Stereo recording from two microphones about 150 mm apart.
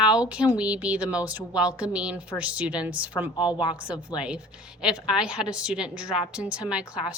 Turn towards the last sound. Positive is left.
turn(degrees=-5)  # may be behind; listen again after turning